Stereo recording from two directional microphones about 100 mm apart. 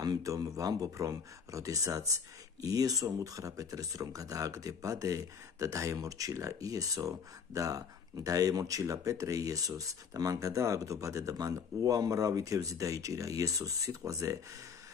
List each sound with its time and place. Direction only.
0.0 s speech: 35° right (ahead or behind)